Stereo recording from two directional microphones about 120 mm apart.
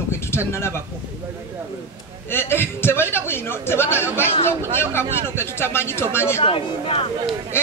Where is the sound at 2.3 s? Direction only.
20° left (ahead or behind).